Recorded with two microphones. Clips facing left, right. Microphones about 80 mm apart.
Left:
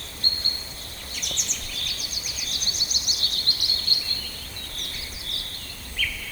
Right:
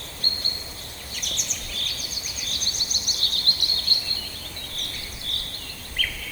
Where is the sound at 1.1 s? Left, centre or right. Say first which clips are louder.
Even; right.